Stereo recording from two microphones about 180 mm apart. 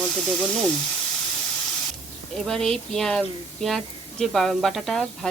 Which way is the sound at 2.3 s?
5° left (ahead or behind).